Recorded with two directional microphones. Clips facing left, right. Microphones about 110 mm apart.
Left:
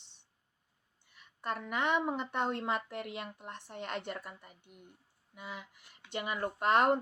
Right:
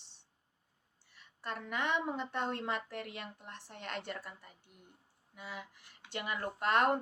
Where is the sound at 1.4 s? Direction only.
15° left (ahead or behind).